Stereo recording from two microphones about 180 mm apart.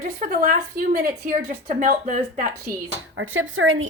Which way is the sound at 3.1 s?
90° right.